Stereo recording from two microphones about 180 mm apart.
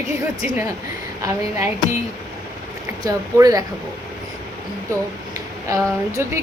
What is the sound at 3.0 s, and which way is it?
Speech, 20° right (ahead or behind).